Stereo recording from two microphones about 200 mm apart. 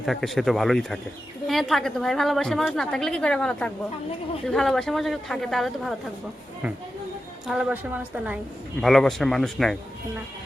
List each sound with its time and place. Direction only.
0.0 s a woman's voice: centre (ahead or behind)
7.4 s a woman's voice: 5° right (ahead or behind)